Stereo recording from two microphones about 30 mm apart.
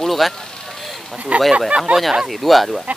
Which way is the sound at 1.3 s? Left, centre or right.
Right.